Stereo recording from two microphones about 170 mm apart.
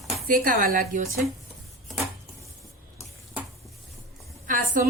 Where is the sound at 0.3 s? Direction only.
55° right (ahead or behind).